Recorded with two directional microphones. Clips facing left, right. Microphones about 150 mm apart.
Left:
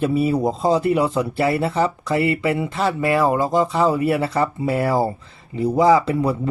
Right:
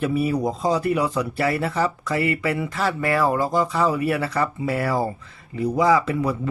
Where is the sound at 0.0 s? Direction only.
25° left (ahead or behind).